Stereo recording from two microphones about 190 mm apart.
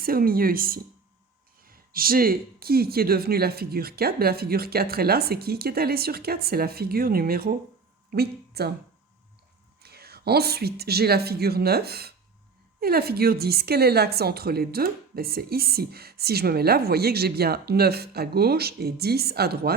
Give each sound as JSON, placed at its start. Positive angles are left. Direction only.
{"t": 0.0, "sound": "speech", "side_deg": -50}
{"t": 9.8, "sound": "a woman's voice", "side_deg": -55}